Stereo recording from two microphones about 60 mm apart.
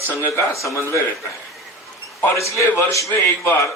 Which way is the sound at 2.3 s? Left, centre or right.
Left.